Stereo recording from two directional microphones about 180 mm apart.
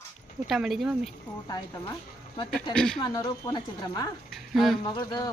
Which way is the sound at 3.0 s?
25° left (ahead or behind).